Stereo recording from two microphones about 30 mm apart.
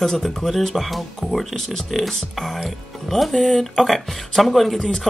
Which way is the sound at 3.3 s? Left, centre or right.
Left.